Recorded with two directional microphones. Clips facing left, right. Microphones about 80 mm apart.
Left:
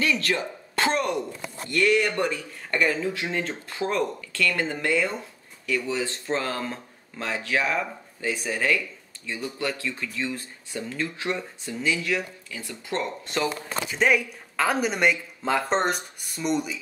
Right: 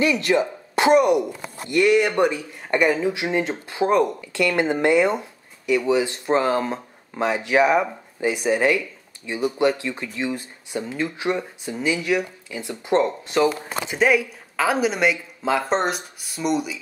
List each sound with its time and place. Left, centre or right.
0.0 s speech: centre
13.2 s speech: centre